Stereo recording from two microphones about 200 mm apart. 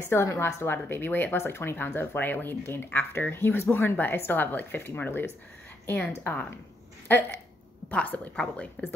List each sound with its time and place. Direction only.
0.0 s a woman's voice: 15° left (ahead or behind)